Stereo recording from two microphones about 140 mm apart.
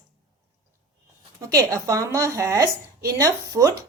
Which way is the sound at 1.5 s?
25° right (ahead or behind).